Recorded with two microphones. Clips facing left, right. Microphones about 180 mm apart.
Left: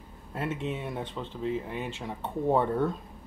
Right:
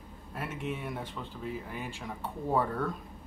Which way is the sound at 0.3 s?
25° left (ahead or behind).